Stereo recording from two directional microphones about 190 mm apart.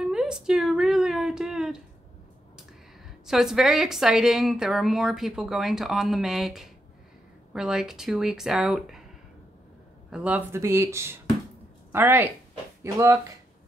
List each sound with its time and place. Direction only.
0.0 s a sound: 5° right (ahead or behind)
3.3 s a woman's voice: centre (ahead or behind)
10.1 s speech: 5° right (ahead or behind)